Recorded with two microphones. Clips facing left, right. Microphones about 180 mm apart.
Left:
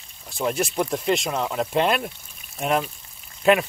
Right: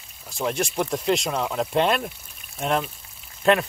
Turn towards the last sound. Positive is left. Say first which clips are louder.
# left 1 dB
turn(degrees=5)  # may be behind; listen again after turning